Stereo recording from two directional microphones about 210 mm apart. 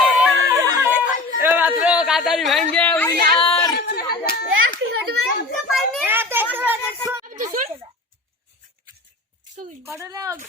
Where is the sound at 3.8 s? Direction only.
45° left (ahead or behind).